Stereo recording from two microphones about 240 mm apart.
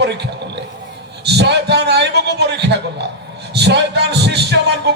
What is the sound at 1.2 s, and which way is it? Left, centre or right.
Speech, right.